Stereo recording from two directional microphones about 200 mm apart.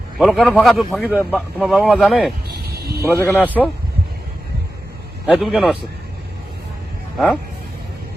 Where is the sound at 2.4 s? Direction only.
50° right (ahead or behind).